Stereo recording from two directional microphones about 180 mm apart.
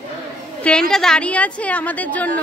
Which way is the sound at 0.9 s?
5° left (ahead or behind).